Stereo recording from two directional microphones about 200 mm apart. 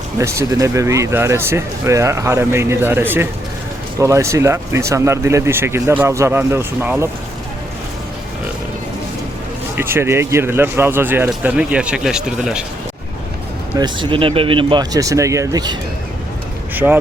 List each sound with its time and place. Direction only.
0.2 s speech: 15° right (ahead or behind)
9.7 s speech: 10° right (ahead or behind)
13.7 s speech: 25° right (ahead or behind)
16.7 s speech: 10° right (ahead or behind)